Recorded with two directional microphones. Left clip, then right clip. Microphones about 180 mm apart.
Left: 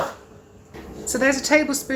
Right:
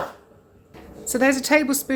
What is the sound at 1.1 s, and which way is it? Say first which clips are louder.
Speech: even; 55° right (ahead or behind).